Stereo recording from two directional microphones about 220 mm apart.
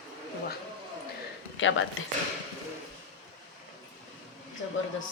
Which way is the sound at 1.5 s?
60° left (ahead or behind).